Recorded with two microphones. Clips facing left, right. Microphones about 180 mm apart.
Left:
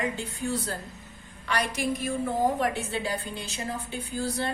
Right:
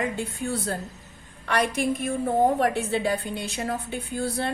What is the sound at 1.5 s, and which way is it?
A woman's voice, 55° right (ahead or behind).